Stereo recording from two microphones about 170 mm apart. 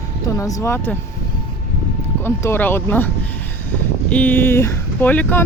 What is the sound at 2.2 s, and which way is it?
Speech, 15° left (ahead or behind).